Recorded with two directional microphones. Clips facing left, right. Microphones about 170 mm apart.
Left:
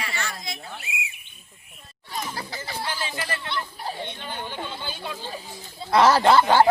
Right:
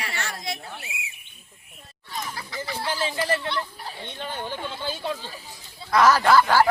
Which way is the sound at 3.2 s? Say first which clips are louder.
Right 6 dB; 35° right (ahead or behind).